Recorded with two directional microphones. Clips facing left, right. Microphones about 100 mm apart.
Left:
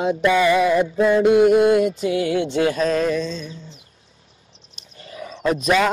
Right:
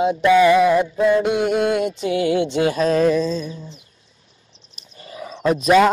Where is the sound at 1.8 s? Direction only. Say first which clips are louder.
Left 1 dB; 25° right (ahead or behind).